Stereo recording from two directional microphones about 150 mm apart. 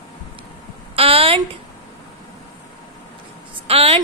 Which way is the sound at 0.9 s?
40° right (ahead or behind).